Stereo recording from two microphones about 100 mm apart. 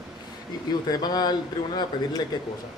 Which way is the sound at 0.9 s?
40° left (ahead or behind).